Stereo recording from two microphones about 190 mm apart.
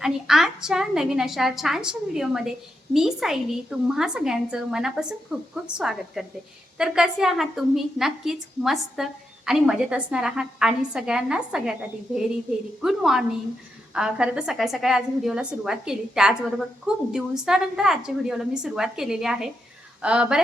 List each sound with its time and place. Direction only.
0.0 s a woman's voice: centre (ahead or behind)